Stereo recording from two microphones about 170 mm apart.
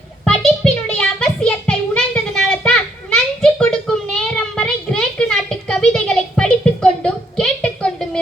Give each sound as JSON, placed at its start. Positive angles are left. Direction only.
{"t": 0.3, "sound": "music", "side_deg": 5}